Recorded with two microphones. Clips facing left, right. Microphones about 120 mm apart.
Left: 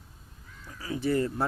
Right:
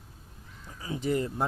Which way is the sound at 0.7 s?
25° right (ahead or behind).